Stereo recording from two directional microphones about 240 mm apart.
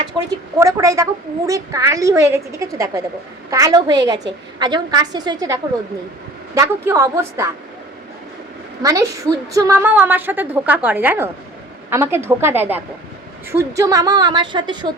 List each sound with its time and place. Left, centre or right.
0.6 s a woman's voice: centre
8.8 s a woman's voice: centre